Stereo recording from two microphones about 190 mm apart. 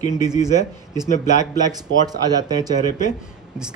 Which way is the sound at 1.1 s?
40° left (ahead or behind).